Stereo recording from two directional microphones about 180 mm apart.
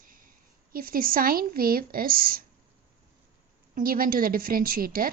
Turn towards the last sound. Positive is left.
turn(degrees=-50)  # may be behind; listen again after turning